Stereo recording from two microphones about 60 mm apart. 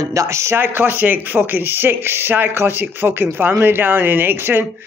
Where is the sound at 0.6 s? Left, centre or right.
Right.